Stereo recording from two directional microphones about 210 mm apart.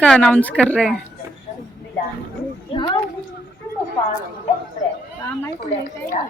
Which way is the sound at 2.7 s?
25° left (ahead or behind).